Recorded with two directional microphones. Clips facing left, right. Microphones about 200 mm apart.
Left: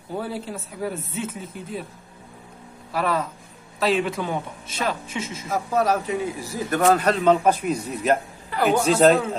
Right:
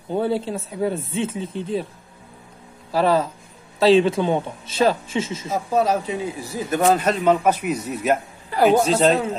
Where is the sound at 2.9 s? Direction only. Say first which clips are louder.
Right 6 dB; 30° right (ahead or behind).